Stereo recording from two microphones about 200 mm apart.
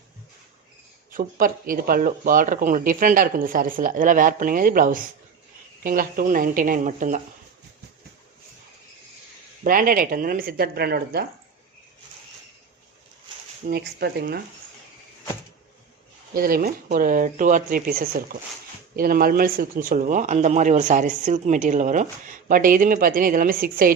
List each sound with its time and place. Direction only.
1.1 s speech: 45° right (ahead or behind)
9.6 s speech: 45° right (ahead or behind)
13.7 s speech: 50° right (ahead or behind)
16.3 s speech: 45° right (ahead or behind)